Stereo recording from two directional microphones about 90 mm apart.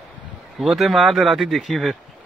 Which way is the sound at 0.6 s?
Centre (ahead or behind).